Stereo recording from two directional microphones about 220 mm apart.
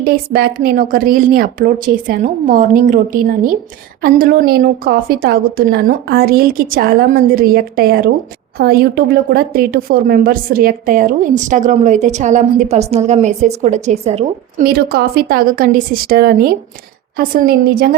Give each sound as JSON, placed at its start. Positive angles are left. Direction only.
{"t": 0.0, "sound": "a woman's voice", "side_deg": -40}
{"t": 14.6, "sound": "a woman's voice", "side_deg": -45}